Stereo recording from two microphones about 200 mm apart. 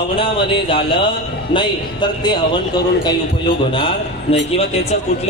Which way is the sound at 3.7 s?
25° left (ahead or behind).